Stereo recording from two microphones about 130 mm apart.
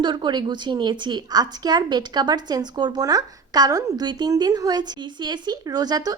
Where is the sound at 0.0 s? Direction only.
35° right (ahead or behind).